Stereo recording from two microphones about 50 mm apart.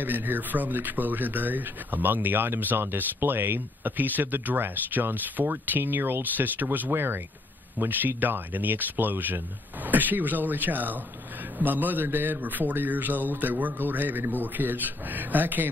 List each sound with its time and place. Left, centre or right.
0.0 s speech: right